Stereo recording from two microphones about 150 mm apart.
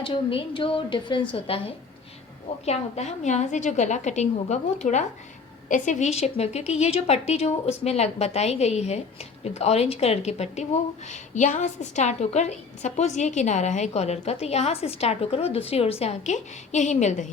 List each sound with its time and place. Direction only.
0.0 s a woman's voice: 35° left (ahead or behind); by 17.3 s 55° left (ahead or behind)